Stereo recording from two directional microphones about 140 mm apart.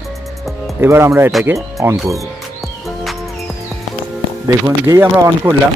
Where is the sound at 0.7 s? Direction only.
15° right (ahead or behind).